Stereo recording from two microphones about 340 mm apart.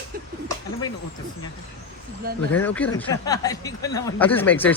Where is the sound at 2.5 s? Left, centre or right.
Centre.